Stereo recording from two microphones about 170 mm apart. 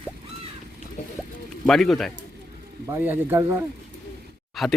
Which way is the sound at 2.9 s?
15° right (ahead or behind).